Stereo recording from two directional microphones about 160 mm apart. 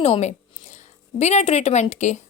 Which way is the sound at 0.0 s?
45° left (ahead or behind).